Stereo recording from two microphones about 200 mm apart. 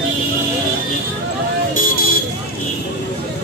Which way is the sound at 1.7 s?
45° left (ahead or behind).